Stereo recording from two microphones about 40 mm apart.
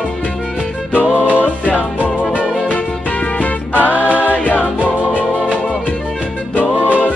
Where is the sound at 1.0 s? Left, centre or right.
Right.